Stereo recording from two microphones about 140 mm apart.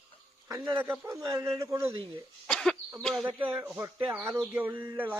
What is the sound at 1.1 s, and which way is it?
Speech, 25° right (ahead or behind).